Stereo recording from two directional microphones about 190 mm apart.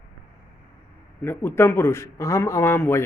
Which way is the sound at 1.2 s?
10° left (ahead or behind).